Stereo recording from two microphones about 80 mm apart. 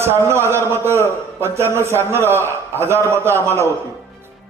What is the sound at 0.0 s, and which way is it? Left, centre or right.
A man's voice, right.